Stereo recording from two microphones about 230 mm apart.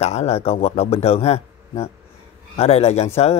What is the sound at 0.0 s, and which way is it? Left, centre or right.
Speech, left.